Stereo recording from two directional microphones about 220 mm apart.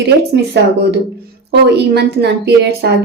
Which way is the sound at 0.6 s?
50° right (ahead or behind).